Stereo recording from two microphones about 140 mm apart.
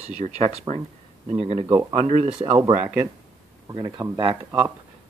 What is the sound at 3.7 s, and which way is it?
Speech, 30° right (ahead or behind).